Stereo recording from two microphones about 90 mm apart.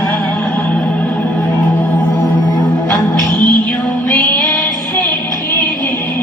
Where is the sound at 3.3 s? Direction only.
20° left (ahead or behind).